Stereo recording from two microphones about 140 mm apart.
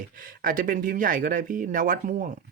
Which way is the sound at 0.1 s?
90° right.